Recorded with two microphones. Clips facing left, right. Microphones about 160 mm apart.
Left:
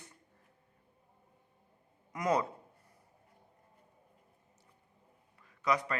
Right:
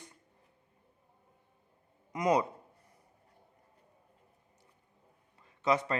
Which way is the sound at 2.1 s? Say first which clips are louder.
Right 3 dB; 20° right (ahead or behind).